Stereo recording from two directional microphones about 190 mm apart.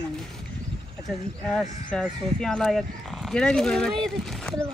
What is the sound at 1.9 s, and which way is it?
Speech, 5° left (ahead or behind).